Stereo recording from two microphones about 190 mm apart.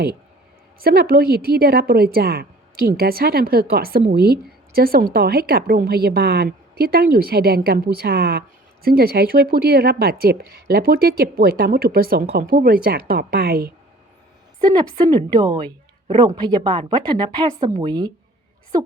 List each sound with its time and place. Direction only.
0.8 s a woman's voice: 55° right (ahead or behind)
14.6 s a woman's voice: 20° right (ahead or behind)